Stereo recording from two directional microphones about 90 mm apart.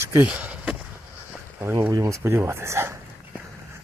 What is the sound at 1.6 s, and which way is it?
Speech, 30° right (ahead or behind).